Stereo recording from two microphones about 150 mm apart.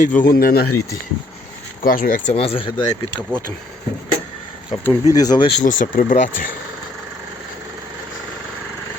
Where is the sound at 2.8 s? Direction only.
25° left (ahead or behind).